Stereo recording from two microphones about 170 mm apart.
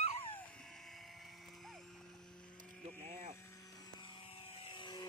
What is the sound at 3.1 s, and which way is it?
Vehicle, 50° right (ahead or behind).